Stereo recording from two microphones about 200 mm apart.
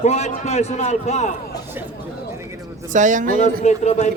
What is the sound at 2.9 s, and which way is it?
Speech, 40° right (ahead or behind).